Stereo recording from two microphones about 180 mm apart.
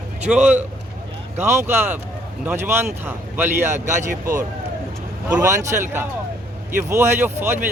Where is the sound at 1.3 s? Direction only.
40° right (ahead or behind).